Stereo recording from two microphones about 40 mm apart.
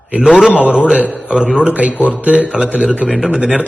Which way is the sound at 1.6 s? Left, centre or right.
Right.